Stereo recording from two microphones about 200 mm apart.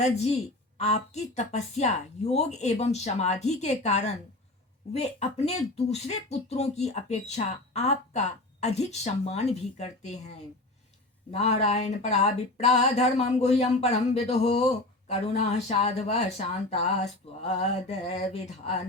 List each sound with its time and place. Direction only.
0.0 s speech: 35° left (ahead or behind)